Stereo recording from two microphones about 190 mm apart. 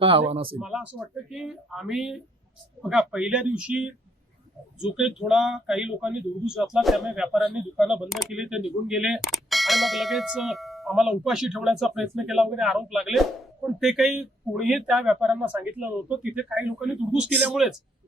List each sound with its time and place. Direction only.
0.0 s speech: 30° right (ahead or behind)
0.6 s speech: 5° right (ahead or behind)